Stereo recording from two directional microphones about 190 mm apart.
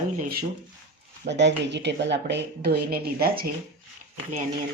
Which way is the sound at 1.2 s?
65° right (ahead or behind).